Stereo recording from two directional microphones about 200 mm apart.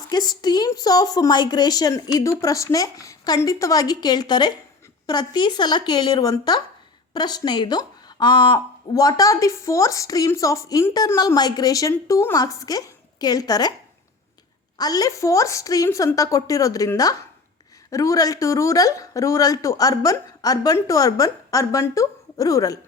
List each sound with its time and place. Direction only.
0.1 s a woman's voice: 20° left (ahead or behind)
14.8 s a woman's voice: 20° left (ahead or behind)